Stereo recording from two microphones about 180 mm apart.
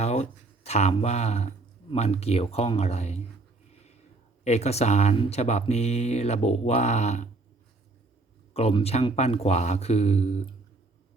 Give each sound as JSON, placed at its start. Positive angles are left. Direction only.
{"t": 0.0, "sound": "speech", "side_deg": 35}
{"t": 4.4, "sound": "mantra", "side_deg": 40}
{"t": 8.5, "sound": "mantra", "side_deg": 35}